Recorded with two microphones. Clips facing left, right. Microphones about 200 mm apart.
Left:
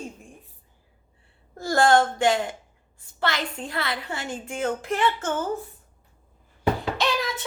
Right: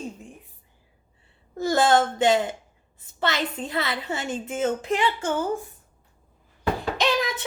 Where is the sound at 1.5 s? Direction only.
20° right (ahead or behind).